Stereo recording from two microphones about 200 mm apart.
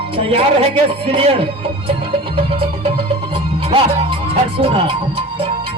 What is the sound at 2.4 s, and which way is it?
Music, 25° right (ahead or behind).